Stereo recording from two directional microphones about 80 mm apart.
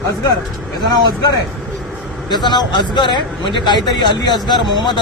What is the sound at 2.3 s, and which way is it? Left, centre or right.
A man's voice, left.